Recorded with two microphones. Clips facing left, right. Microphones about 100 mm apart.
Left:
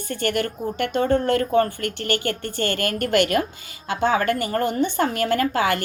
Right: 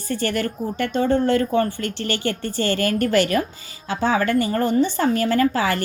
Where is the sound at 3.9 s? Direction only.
40° right (ahead or behind).